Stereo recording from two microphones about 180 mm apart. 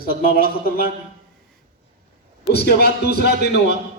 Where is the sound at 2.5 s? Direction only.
65° left (ahead or behind).